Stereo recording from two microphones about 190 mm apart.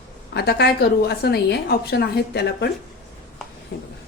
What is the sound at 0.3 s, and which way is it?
A woman's voice, 60° left (ahead or behind).